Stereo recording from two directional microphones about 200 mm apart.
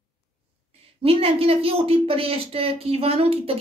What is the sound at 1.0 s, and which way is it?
A woman's voice, 30° right (ahead or behind).